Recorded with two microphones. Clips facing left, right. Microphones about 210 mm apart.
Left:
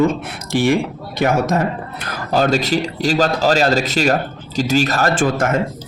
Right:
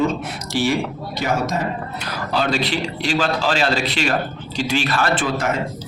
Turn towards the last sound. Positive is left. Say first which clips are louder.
# left 4 dB
turn(degrees=50)  # may be behind; listen again after turning